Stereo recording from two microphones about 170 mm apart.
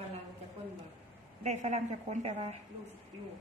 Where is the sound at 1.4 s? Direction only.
45° right (ahead or behind).